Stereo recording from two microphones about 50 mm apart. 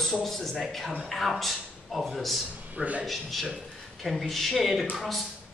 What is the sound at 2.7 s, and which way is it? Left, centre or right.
Speech, right.